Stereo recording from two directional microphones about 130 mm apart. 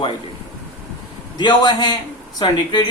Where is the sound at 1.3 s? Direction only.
35° left (ahead or behind).